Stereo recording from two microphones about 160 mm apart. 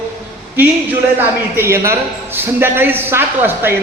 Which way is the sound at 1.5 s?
15° right (ahead or behind).